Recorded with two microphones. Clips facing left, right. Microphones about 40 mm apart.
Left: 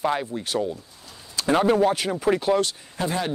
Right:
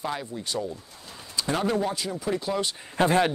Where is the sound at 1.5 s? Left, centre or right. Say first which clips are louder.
Left 7 dB; left.